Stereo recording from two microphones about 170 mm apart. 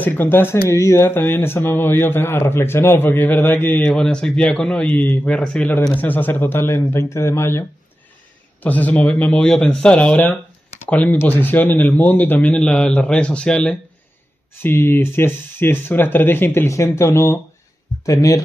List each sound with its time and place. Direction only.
0.0 s speech: 10° left (ahead or behind)
8.6 s speech: 10° left (ahead or behind)